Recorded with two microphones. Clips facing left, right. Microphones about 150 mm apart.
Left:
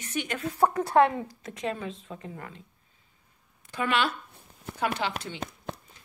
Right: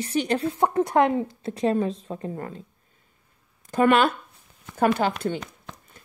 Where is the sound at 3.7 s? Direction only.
50° right (ahead or behind).